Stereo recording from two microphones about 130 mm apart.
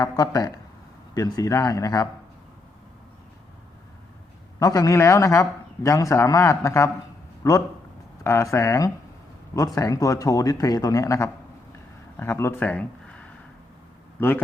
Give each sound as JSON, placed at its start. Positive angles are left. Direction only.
{"t": 0.0, "sound": "a man's voice", "side_deg": 30}
{"t": 4.6, "sound": "a man's voice", "side_deg": 25}